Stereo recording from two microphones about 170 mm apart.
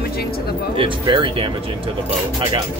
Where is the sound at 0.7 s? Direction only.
30° right (ahead or behind).